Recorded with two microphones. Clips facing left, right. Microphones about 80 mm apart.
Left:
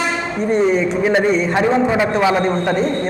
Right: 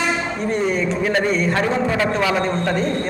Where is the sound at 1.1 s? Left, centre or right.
Centre.